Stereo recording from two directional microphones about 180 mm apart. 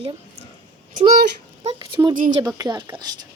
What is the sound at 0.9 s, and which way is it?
Speech, 45° right (ahead or behind).